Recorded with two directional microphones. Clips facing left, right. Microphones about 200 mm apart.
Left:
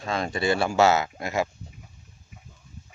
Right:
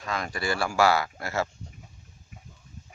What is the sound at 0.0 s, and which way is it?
Speech, 25° left (ahead or behind).